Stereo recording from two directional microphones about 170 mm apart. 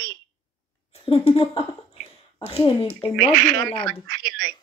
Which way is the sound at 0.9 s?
35° left (ahead or behind).